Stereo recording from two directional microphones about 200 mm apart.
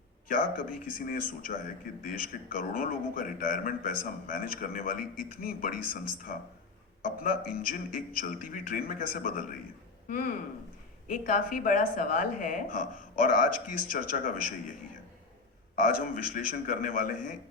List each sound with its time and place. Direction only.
0.3 s a man's voice: 45° left (ahead or behind)
11.1 s a man's voice: 45° left (ahead or behind)
15.7 s a man's voice: 45° left (ahead or behind)